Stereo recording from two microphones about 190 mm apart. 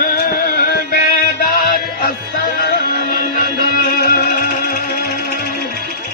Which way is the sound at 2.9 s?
50° left (ahead or behind).